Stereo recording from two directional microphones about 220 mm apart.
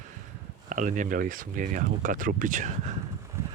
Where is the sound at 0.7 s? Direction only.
35° right (ahead or behind).